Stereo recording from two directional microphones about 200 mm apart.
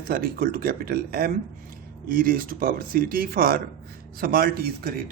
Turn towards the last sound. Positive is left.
turn(degrees=-50)  # may be behind; listen again after turning